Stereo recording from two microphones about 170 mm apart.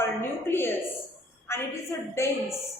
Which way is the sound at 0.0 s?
15° left (ahead or behind).